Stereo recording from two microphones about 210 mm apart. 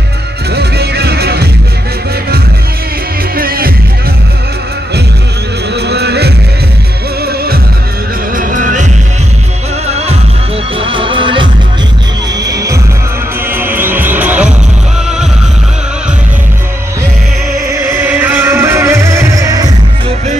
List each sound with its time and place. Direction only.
0.6 s music: 50° right (ahead or behind)
3.3 s music: 45° right (ahead or behind)
5.8 s music: 50° right (ahead or behind)
8.4 s music: 40° right (ahead or behind)
9.8 s music: 30° right (ahead or behind)
12.4 s heart sounds: 15° right (ahead or behind)
13.5 s music: 10° right (ahead or behind)
17.6 s music: 10° right (ahead or behind)